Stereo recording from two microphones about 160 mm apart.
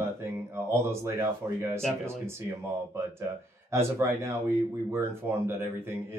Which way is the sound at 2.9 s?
15° right (ahead or behind).